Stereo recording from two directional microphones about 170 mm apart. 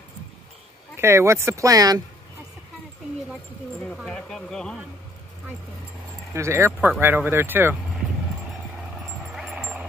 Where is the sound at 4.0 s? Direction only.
Centre (ahead or behind).